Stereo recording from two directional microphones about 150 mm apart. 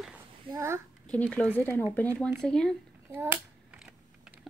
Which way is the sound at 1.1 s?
10° left (ahead or behind).